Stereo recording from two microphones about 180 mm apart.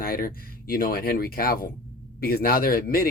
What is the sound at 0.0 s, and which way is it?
Speech, 55° left (ahead or behind).